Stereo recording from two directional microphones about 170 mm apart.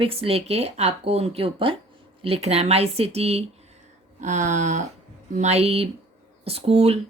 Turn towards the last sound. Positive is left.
turn(degrees=-40)  # may be behind; listen again after turning